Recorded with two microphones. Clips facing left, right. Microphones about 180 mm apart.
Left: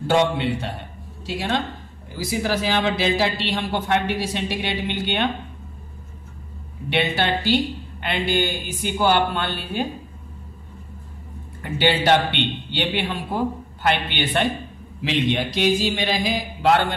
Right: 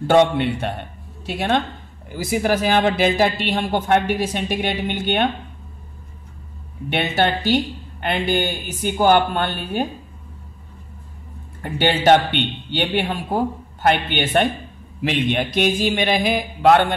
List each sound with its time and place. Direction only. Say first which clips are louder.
0.0 s a man's voice: right 4 dB; 55° right (ahead or behind)
6.9 s a woman's voice: right 2 dB; 50° right (ahead or behind)
11.6 s a woman's voice: right 3 dB; 45° right (ahead or behind)